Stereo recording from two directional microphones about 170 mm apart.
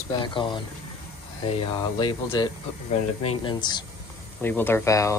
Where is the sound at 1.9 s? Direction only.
25° left (ahead or behind).